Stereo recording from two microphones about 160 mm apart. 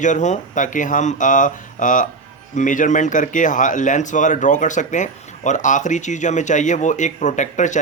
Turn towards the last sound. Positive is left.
turn(degrees=50)  # may be behind; listen again after turning